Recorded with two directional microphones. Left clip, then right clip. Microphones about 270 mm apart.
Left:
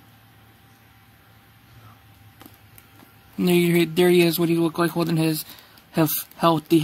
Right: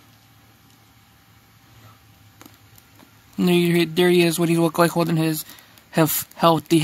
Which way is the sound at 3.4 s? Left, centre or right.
Centre.